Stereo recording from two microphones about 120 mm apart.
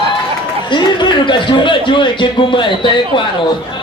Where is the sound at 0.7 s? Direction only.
40° left (ahead or behind).